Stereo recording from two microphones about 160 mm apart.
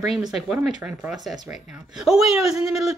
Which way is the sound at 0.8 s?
15° right (ahead or behind).